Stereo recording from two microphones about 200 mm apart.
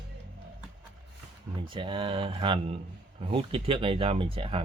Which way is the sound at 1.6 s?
25° right (ahead or behind).